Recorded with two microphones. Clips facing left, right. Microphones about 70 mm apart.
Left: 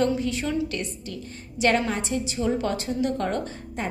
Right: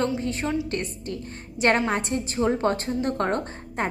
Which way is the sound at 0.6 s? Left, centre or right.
Right.